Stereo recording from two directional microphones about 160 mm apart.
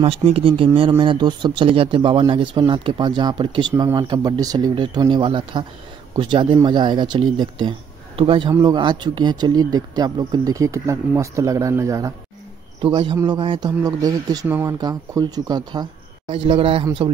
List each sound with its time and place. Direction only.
0.0 s speech: 40° right (ahead or behind); by 12.1 s 20° right (ahead or behind)
12.8 s speech: 30° right (ahead or behind)
16.3 s speech: 35° right (ahead or behind)